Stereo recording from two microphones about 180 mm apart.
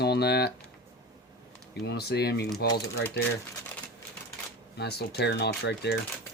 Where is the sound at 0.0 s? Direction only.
65° left (ahead or behind).